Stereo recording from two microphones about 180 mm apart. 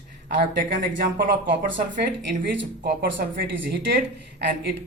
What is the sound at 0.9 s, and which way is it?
Speech, 50° right (ahead or behind).